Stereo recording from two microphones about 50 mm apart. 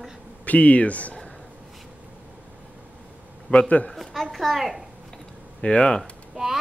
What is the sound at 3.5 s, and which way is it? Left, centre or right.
Speech, left.